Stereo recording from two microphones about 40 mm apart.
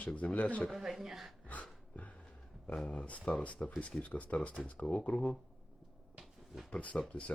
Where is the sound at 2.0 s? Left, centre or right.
Left.